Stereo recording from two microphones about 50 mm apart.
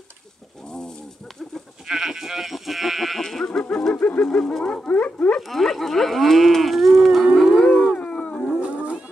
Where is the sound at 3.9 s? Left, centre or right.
Left.